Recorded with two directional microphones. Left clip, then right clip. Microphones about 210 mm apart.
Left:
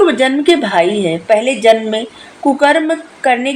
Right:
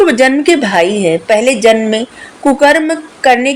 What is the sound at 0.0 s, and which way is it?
A woman's voice, 35° right (ahead or behind).